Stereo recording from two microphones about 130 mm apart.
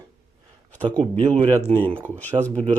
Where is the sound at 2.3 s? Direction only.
15° left (ahead or behind).